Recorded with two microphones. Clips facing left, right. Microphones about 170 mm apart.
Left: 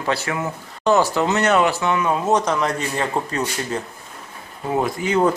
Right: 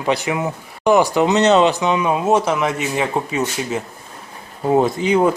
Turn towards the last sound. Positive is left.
turn(degrees=-15)  # may be behind; listen again after turning